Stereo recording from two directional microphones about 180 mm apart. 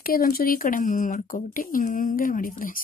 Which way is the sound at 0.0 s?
55° left (ahead or behind).